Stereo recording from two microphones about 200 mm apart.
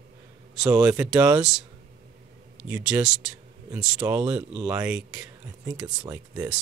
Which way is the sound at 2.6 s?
5° right (ahead or behind).